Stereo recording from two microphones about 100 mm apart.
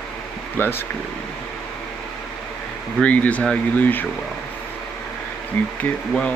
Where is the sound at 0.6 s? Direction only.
20° left (ahead or behind).